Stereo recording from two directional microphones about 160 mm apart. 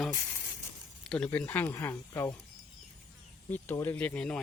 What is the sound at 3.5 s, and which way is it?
Speech, 15° left (ahead or behind).